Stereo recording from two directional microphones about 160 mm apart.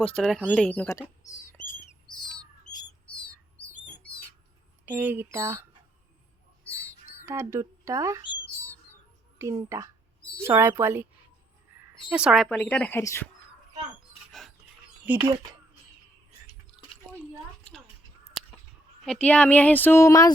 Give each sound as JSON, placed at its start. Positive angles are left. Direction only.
{"t": 0.0, "sound": "speech", "side_deg": 5}
{"t": 4.9, "sound": "speech", "side_deg": -10}
{"t": 7.3, "sound": "speech", "side_deg": -15}
{"t": 9.4, "sound": "speech", "side_deg": -20}
{"t": 12.1, "sound": "speech", "side_deg": -5}
{"t": 15.0, "sound": "speech", "side_deg": -10}
{"t": 17.1, "sound": "a sound", "side_deg": 5}
{"t": 19.0, "sound": "speech", "side_deg": 5}